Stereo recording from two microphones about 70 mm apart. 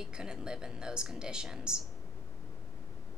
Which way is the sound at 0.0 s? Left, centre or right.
Centre.